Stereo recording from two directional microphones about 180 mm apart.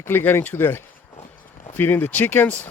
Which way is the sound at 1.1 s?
45° left (ahead or behind).